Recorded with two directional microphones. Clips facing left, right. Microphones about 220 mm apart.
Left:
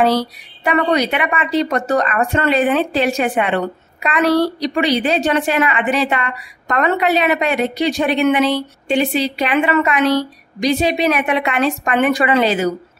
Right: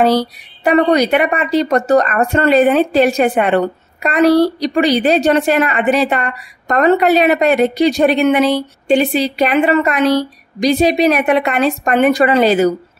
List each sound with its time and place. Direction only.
0.7 s speech: 40° right (ahead or behind)